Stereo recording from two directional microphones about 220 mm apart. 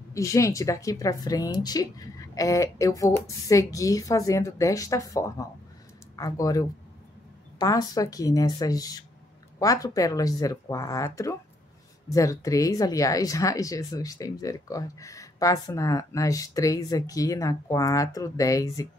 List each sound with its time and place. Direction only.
0.1 s speech: 15° left (ahead or behind)